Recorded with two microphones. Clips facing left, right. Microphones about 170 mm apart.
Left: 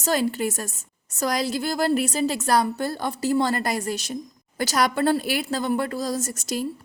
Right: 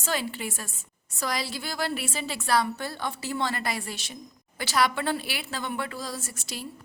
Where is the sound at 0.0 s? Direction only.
40° left (ahead or behind).